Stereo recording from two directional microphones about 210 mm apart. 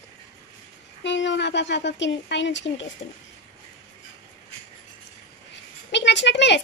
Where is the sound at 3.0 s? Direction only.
25° left (ahead or behind).